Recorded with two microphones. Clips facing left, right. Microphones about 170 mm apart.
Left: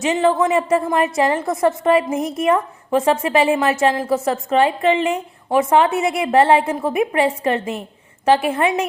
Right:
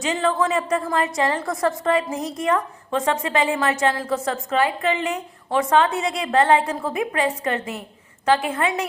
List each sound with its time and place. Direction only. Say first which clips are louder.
0.0 s a woman's voice: left 5 dB; 25° left (ahead or behind)